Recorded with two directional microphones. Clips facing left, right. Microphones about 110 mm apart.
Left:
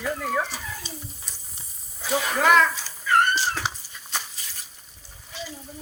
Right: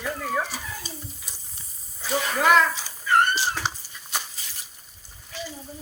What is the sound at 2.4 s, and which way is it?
Speech, 10° right (ahead or behind).